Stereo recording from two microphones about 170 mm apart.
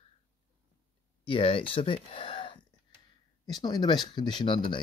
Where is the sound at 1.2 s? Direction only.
30° left (ahead or behind).